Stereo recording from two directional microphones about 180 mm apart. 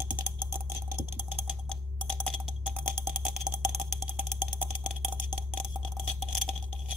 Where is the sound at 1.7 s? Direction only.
5° left (ahead or behind).